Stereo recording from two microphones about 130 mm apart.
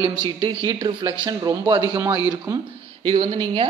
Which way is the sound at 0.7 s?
35° right (ahead or behind).